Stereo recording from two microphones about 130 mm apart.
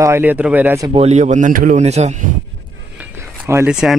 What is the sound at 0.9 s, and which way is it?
Speech, 55° right (ahead or behind).